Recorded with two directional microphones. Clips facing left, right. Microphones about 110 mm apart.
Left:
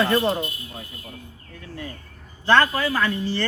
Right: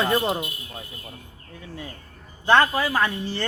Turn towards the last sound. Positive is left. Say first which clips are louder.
# left 1 dB
turn(degrees=-15)  # may be behind; listen again after turning